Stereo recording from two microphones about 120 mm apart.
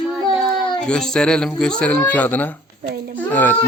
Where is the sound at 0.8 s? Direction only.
5° left (ahead or behind).